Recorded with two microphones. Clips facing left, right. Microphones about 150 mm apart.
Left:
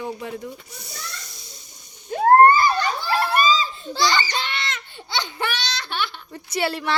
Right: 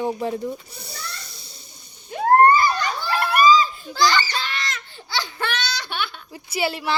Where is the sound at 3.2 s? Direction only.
25° left (ahead or behind).